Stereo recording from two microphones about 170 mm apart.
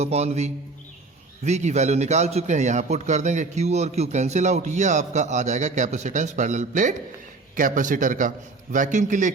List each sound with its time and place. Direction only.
0.0 s a man's voice: 40° right (ahead or behind)